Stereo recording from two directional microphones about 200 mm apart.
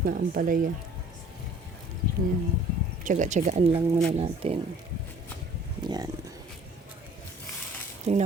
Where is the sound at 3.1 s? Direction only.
35° right (ahead or behind).